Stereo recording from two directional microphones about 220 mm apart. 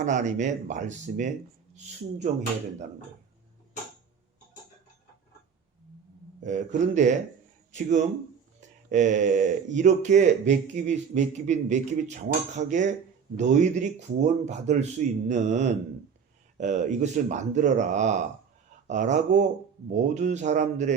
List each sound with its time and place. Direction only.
0.0 s speech: 35° right (ahead or behind)
6.4 s speech: 35° right (ahead or behind)